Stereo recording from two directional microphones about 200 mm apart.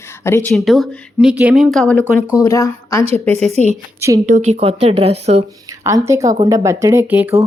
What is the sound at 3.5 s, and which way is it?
Speech, 35° right (ahead or behind).